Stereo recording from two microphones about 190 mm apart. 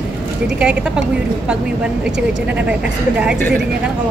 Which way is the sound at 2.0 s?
5° right (ahead or behind).